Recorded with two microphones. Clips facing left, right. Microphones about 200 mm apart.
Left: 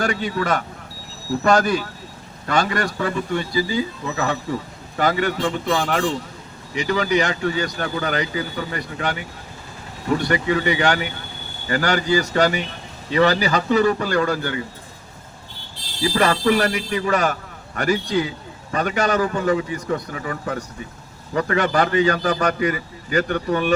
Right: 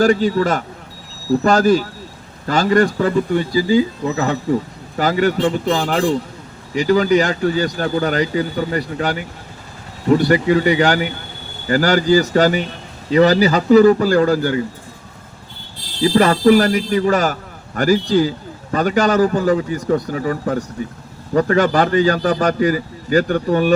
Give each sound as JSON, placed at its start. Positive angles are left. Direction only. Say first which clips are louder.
{"t": 0.0, "sound": "speech", "louder": "right 8 dB", "side_deg": -35}
{"t": 16.0, "sound": "speech", "louder": "right 6 dB", "side_deg": -35}